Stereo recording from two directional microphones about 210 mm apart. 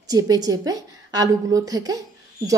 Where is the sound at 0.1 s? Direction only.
15° right (ahead or behind).